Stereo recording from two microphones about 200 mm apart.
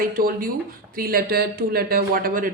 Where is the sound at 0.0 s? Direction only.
45° right (ahead or behind).